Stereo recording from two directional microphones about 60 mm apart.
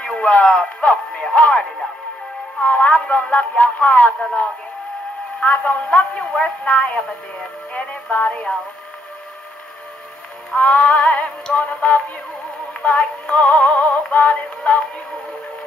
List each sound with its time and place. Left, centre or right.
0.0 s speech: centre
2.6 s speech: left
8.3 s speech: centre
10.5 s speech: left
13.4 s speech: left
14.6 s music: centre